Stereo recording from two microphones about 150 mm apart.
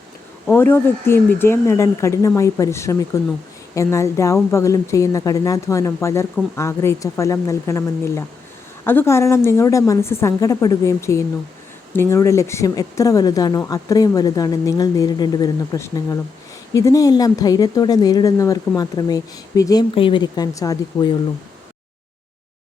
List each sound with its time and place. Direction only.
0.5 s speech: 15° left (ahead or behind)